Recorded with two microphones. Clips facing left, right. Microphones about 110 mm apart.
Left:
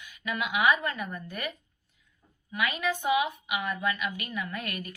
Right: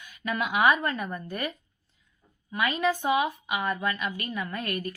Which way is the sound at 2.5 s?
35° right (ahead or behind).